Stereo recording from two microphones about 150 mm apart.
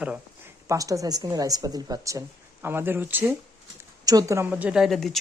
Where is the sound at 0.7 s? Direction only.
20° right (ahead or behind).